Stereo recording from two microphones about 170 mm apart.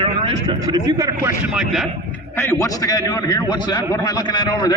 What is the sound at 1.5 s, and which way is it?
Speech, centre (ahead or behind).